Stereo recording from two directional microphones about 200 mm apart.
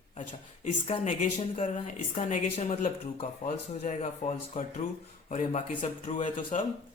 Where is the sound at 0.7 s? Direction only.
35° left (ahead or behind).